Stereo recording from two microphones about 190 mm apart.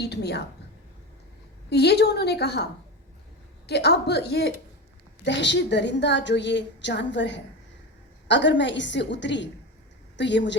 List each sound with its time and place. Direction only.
0.0 s a woman's voice: 60° left (ahead or behind)
1.7 s a woman's voice: 60° left (ahead or behind)
3.7 s a woman's voice: 60° left (ahead or behind)